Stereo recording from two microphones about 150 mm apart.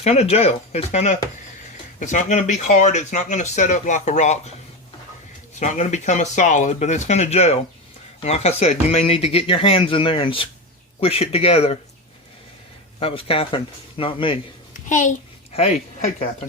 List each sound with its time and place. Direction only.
0.0 s speech: 45° left (ahead or behind)
5.5 s speech: 55° left (ahead or behind)
13.0 s speech: 40° left (ahead or behind)
14.7 s a sound: 55° left (ahead or behind)
15.5 s speech: 45° left (ahead or behind)